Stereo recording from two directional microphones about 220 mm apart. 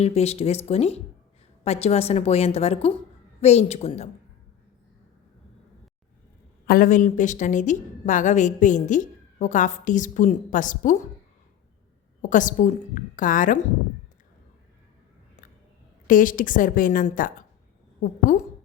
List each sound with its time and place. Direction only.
0.0 s a woman's voice: 30° left (ahead or behind)
6.7 s a woman's voice: 40° left (ahead or behind)
12.3 s a woman's voice: 35° left (ahead or behind)
16.0 s a woman's voice: 40° left (ahead or behind)